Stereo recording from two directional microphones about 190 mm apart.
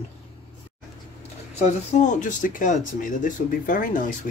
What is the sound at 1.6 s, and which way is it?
Speech, 40° left (ahead or behind).